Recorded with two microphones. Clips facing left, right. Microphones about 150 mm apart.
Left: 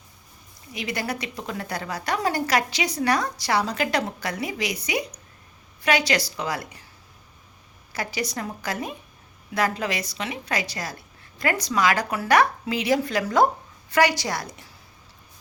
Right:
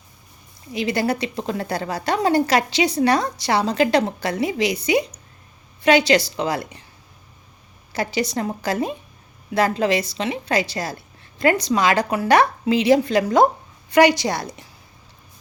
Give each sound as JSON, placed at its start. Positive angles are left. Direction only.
{"t": 0.7, "sound": "a woman's voice", "side_deg": -30}
{"t": 7.9, "sound": "a woman's voice", "side_deg": -25}